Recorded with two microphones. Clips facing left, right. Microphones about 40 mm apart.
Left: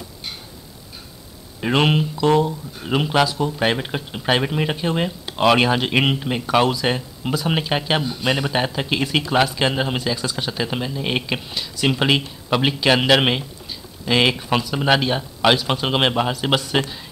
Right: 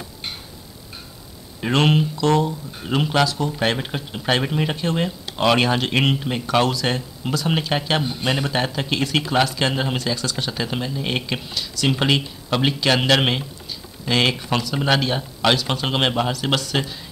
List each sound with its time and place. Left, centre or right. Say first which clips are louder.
1.6 s speech: even; centre